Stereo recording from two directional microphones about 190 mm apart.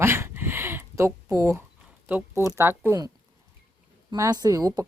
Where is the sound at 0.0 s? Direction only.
15° right (ahead or behind).